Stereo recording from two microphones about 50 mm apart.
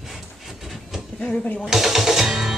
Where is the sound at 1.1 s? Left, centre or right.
Left.